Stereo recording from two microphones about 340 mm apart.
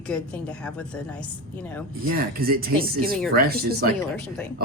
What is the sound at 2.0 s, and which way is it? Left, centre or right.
Speech, right.